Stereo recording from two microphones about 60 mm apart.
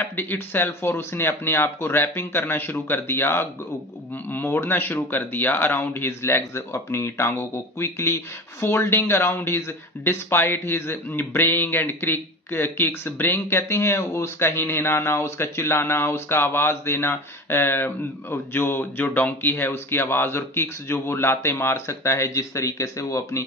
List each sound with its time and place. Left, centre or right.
0.1 s speech: left